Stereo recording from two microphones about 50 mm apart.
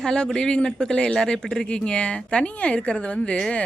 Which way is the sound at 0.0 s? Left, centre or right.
Centre.